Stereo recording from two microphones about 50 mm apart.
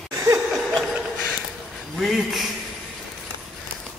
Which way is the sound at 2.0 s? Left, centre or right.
Centre.